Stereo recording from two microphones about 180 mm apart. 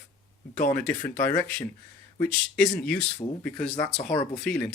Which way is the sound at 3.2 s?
20° left (ahead or behind).